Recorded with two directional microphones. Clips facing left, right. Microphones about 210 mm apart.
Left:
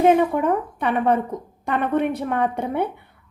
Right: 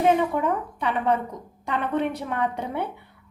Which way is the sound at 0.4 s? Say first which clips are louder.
Left 4 dB; 55° left (ahead or behind).